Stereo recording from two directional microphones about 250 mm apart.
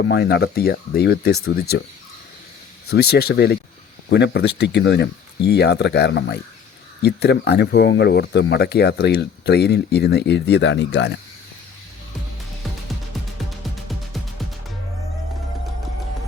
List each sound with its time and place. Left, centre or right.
0.1 s speech: left
2.9 s speech: left